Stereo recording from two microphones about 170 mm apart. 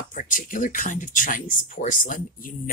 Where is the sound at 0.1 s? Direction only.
50° left (ahead or behind).